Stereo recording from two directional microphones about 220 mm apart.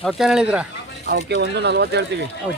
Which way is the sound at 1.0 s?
50° right (ahead or behind).